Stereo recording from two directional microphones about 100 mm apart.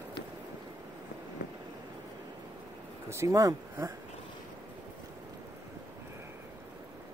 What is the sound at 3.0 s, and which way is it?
Speech, 30° right (ahead or behind).